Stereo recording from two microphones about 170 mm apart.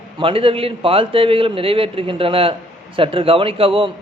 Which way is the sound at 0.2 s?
30° right (ahead or behind).